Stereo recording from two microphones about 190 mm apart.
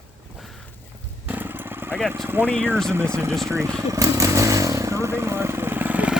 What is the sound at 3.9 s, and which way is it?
Motorcycle, 15° right (ahead or behind).